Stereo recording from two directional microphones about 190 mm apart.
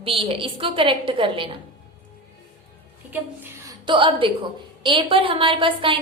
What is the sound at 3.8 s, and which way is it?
Speech, 25° right (ahead or behind).